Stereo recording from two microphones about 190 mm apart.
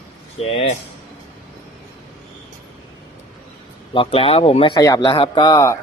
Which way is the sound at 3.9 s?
30° left (ahead or behind).